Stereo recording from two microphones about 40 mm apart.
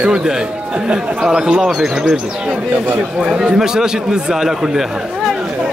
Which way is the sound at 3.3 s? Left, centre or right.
Centre.